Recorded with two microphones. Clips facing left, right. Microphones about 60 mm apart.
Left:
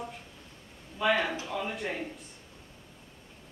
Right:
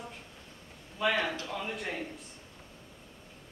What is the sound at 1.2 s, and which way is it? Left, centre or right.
Speech, centre.